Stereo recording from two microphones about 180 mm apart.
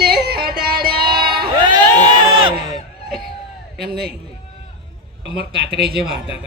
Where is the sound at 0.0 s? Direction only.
60° right (ahead or behind).